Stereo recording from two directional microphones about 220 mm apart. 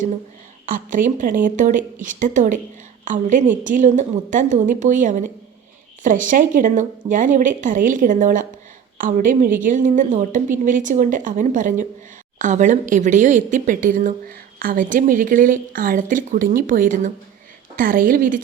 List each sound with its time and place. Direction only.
0.6 s a woman's voice: 35° right (ahead or behind)